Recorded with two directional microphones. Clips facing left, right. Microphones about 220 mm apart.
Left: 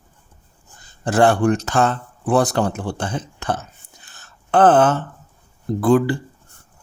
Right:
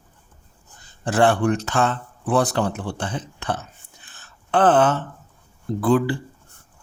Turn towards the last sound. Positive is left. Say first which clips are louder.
# left 3 dB
turn(degrees=45)  # may be behind; listen again after turning